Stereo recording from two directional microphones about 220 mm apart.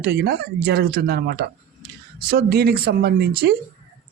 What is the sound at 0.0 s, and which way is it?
Speech, 50° right (ahead or behind).